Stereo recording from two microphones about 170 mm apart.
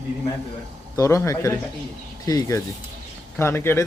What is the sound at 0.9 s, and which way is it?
A man's voice, 15° left (ahead or behind).